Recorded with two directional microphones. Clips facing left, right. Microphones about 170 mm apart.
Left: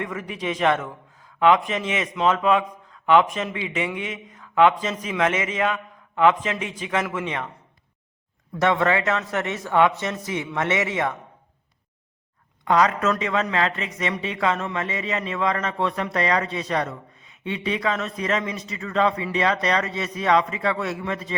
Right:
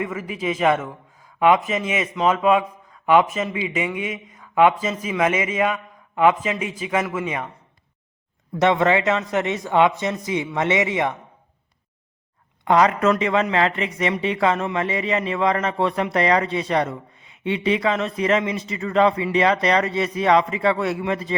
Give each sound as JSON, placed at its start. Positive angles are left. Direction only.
{"t": 0.0, "sound": "a man's voice", "side_deg": -5}
{"t": 8.5, "sound": "a man's voice", "side_deg": -20}
{"t": 12.6, "sound": "a man's voice", "side_deg": -25}